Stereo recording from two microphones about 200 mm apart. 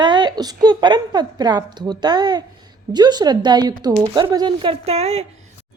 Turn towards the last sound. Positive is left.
turn(degrees=-30)  # may be behind; listen again after turning